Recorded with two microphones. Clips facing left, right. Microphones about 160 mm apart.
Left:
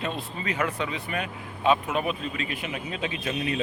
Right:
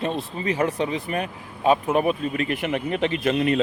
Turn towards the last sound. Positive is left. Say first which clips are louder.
# right 8 dB
turn(degrees=-60)  # may be behind; listen again after turning